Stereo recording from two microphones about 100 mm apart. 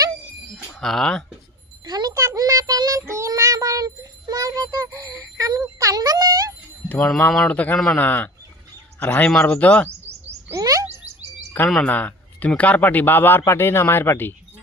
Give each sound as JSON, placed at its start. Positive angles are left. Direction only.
{"t": 0.8, "sound": "speech", "side_deg": 5}
{"t": 1.8, "sound": "a sound", "side_deg": -45}
{"t": 2.2, "sound": "child singing", "side_deg": -35}
{"t": 6.8, "sound": "speech", "side_deg": 10}
{"t": 10.5, "sound": "a sound", "side_deg": -35}
{"t": 11.7, "sound": "speech", "side_deg": 10}